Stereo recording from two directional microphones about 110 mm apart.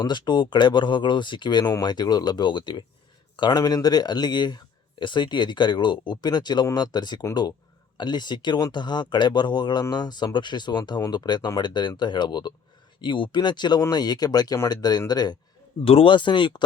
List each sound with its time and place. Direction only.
0.0 s speech: 40° left (ahead or behind)
15.8 s speech: 60° left (ahead or behind)